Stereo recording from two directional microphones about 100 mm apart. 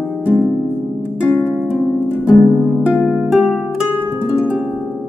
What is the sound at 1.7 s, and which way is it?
Harp, 15° right (ahead or behind).